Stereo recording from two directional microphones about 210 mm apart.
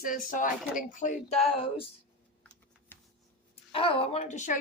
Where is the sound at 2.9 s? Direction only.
10° left (ahead or behind).